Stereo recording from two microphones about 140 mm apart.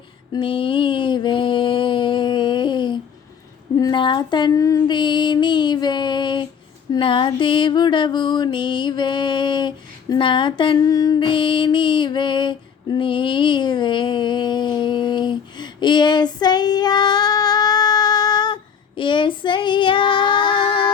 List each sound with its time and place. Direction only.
0.3 s a sound: 40° left (ahead or behind)
3.8 s female singing: 30° left (ahead or behind)
6.9 s music: 35° left (ahead or behind)